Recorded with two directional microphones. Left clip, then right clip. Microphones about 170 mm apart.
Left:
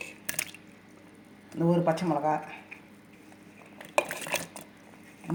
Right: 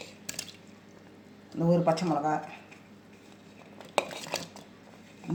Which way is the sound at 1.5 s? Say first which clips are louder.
Even; 10° left (ahead or behind).